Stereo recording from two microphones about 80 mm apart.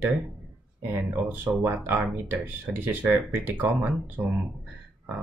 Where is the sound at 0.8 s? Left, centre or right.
Right.